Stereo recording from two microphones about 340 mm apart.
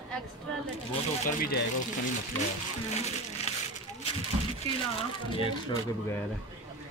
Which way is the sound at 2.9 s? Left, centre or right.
Centre.